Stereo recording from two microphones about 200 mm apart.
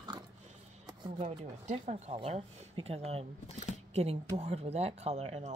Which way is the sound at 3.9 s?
30° right (ahead or behind).